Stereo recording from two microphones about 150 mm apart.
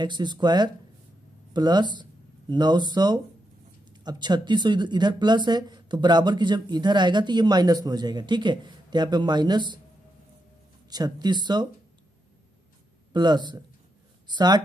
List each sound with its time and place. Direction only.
0.0 s speech: 30° right (ahead or behind)
10.9 s speech: 25° right (ahead or behind)
13.1 s speech: 30° right (ahead or behind)